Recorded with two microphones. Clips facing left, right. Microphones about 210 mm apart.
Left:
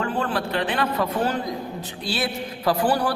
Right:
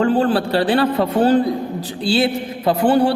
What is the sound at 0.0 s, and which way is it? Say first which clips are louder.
A man's voice: right 9 dB; 30° right (ahead or behind).